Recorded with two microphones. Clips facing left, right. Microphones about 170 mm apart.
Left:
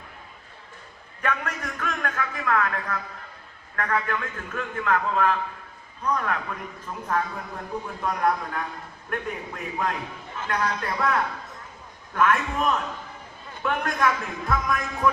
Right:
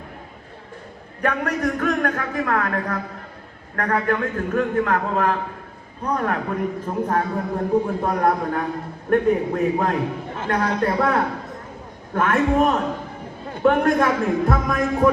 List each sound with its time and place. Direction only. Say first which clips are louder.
1.2 s a man's voice: right 7 dB; 40° right (ahead or behind)
15.0 s music: right 6 dB; 35° right (ahead or behind)